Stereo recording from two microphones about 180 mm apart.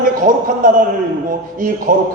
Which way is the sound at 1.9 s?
50° right (ahead or behind).